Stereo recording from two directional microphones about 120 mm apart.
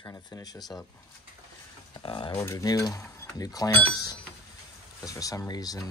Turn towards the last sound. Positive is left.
turn(degrees=30)  # may be behind; listen again after turning